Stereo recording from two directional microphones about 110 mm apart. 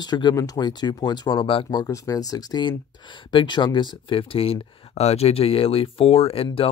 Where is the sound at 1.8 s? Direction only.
30° left (ahead or behind).